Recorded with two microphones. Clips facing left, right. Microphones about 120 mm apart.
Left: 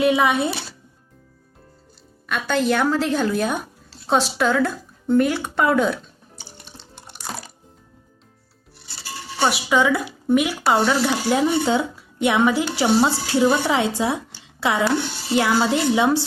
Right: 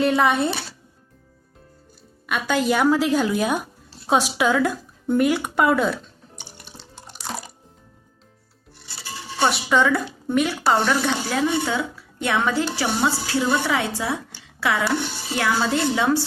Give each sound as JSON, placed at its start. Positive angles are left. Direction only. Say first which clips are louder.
{"t": 0.0, "sound": "a woman's voice", "louder": "left 1 dB", "side_deg": 5}
{"t": 2.2, "sound": "speech", "louder": "left 1 dB", "side_deg": -5}
{"t": 6.9, "sound": "water", "louder": "even", "side_deg": 10}
{"t": 9.4, "sound": "a woman's voice", "louder": "even", "side_deg": 5}
{"t": 11.3, "sound": "a woman's voice", "louder": "left 6 dB", "side_deg": 25}